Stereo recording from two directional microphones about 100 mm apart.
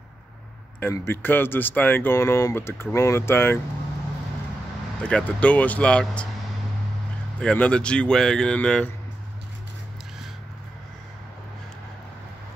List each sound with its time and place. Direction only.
1.0 s speech: 20° left (ahead or behind)
5.0 s speech: 10° left (ahead or behind)
7.3 s speech: 10° left (ahead or behind)